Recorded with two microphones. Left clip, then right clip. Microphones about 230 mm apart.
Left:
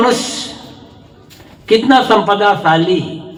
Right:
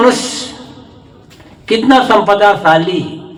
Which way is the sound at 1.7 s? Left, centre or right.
Right.